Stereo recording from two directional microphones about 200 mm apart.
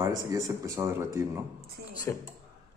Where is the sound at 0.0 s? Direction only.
15° right (ahead or behind).